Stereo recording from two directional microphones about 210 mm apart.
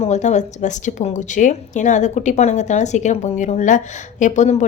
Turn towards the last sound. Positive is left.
turn(degrees=35)  # may be behind; listen again after turning